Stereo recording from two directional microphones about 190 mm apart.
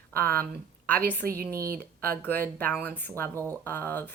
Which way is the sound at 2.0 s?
10° left (ahead or behind).